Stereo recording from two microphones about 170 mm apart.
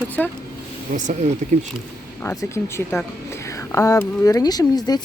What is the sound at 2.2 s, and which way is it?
Speech, 15° left (ahead or behind).